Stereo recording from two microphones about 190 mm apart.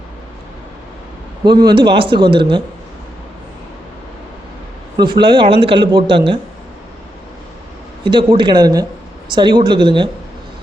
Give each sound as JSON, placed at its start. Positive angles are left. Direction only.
{"t": 1.5, "sound": "speech", "side_deg": -20}
{"t": 5.2, "sound": "speech", "side_deg": -25}
{"t": 8.0, "sound": "speech", "side_deg": -25}